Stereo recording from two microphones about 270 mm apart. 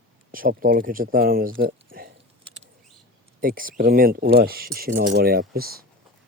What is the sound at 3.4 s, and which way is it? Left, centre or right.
Speech, right.